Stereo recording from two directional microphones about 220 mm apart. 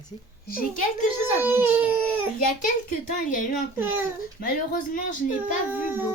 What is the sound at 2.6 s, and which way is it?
Speech, 35° left (ahead or behind).